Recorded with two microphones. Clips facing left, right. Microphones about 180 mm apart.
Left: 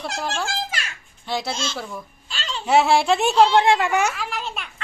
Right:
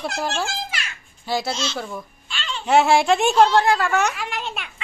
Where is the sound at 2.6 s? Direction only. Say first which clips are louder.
Right 1 dB; centre (ahead or behind).